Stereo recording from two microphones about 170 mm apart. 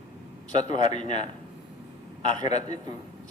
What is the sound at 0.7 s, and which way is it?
Speech, 25° right (ahead or behind).